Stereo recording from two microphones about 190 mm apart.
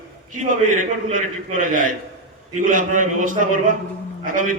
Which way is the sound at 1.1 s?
45° right (ahead or behind).